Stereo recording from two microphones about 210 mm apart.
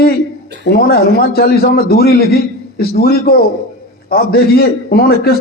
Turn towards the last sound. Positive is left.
turn(degrees=45)  # may be behind; listen again after turning